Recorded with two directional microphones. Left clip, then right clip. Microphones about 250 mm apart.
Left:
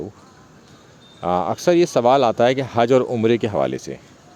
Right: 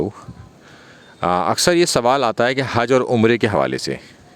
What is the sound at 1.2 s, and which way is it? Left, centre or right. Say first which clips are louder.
Speech: right 3 dB; right.